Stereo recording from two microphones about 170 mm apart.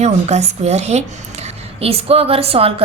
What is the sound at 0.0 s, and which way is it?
A woman's voice, 40° right (ahead or behind).